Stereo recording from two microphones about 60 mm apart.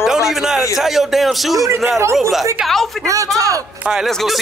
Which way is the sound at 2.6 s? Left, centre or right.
Centre.